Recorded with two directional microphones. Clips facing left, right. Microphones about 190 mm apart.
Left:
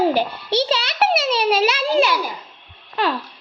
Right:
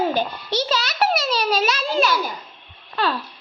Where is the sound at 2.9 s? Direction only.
15° left (ahead or behind).